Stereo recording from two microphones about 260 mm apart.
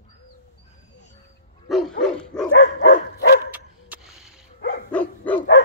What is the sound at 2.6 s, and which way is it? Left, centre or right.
Dog, left.